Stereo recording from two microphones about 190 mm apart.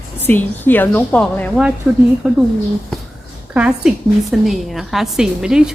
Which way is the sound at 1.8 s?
10° right (ahead or behind).